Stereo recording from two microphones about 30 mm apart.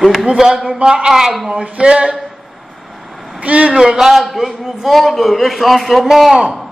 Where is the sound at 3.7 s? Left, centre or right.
Centre.